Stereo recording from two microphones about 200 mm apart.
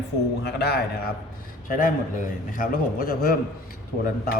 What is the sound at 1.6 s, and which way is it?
A man's voice, 40° left (ahead or behind).